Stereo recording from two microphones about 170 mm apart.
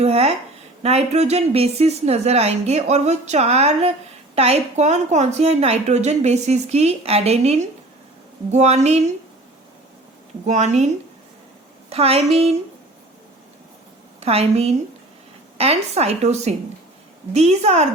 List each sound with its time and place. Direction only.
0.0 s a sound: 40° right (ahead or behind)
0.8 s a woman's voice: 40° right (ahead or behind)
10.4 s a woman's voice: 45° right (ahead or behind)
11.9 s a woman's voice: 35° right (ahead or behind)
14.2 s a woman's voice: 35° right (ahead or behind)